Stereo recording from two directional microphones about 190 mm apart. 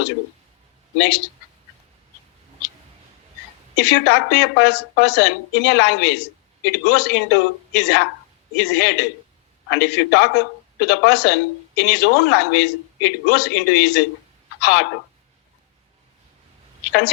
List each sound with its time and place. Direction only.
0.9 s a woman's voice: 65° left (ahead or behind)
3.8 s a woman's voice: 65° left (ahead or behind)